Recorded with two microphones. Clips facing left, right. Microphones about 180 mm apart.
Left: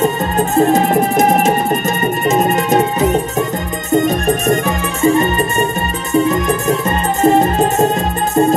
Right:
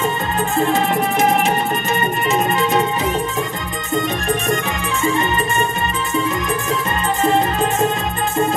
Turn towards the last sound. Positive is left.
turn(degrees=45)  # may be behind; listen again after turning